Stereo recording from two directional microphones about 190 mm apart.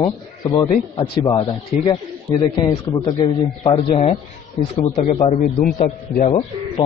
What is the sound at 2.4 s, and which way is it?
A man's voice, 25° left (ahead or behind).